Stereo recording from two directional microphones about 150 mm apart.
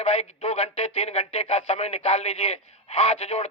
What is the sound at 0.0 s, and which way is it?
Speech, 40° left (ahead or behind).